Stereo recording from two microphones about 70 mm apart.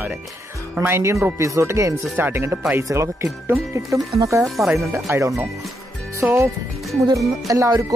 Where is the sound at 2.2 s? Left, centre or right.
Right.